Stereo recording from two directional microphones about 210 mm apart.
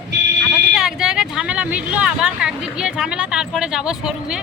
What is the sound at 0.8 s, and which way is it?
Speech, centre (ahead or behind).